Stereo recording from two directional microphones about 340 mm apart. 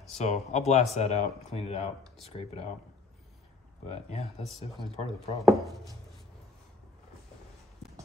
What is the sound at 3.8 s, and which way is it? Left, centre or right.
Speech, centre.